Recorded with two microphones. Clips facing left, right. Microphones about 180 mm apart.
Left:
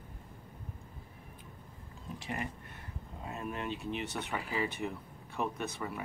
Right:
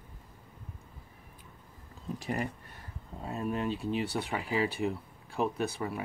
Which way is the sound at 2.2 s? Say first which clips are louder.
Right 5 dB; 40° right (ahead or behind).